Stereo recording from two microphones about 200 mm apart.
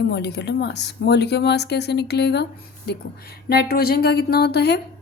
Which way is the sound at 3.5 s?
50° left (ahead or behind).